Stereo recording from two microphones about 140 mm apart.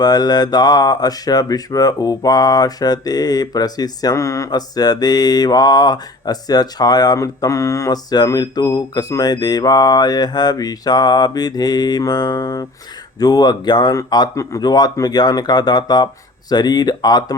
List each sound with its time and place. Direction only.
0.0 s mantra: 30° left (ahead or behind)